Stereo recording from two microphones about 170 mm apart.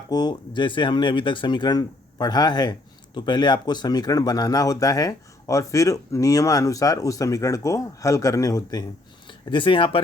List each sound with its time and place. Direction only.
0.1 s speech: 25° left (ahead or behind)